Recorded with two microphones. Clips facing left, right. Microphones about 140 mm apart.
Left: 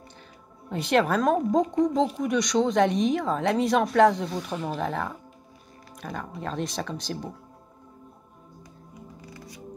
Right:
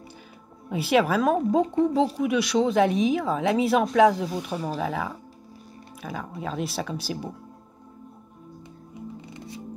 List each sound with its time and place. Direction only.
0.7 s speech: 5° right (ahead or behind)
9.2 s music: 25° right (ahead or behind)